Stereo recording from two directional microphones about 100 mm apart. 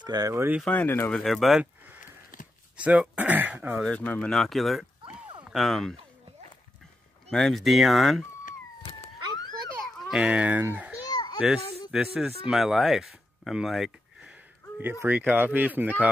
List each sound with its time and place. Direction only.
0.0 s speech: 45° right (ahead or behind)
0.3 s speech: 25° right (ahead or behind)
0.7 s speech: 20° left (ahead or behind)
1.1 s speech: centre (ahead or behind)
1.6 s a sound: 15° right (ahead or behind)
2.8 s speech: 10° right (ahead or behind)
3.8 s speech: 15° left (ahead or behind)
4.3 s speech: centre (ahead or behind)
7.2 s speech: 5° left (ahead or behind)
9.9 s a sound: centre (ahead or behind)
10.2 s speech: 15° right (ahead or behind)
11.1 s children playing: 45° left (ahead or behind)
11.9 s speech: 5° right (ahead or behind)
14.8 s speech: 20° right (ahead or behind)